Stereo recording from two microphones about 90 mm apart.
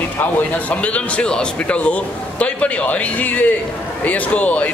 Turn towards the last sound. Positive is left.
turn(degrees=15)  # may be behind; listen again after turning